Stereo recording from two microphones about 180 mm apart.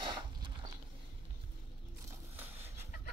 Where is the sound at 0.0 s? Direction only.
25° right (ahead or behind).